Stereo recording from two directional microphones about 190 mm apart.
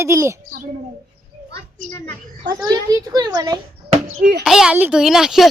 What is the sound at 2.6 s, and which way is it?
Speech, 20° right (ahead or behind).